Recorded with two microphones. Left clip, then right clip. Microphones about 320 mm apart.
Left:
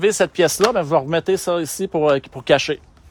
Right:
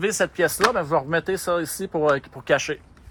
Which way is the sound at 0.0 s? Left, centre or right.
Left.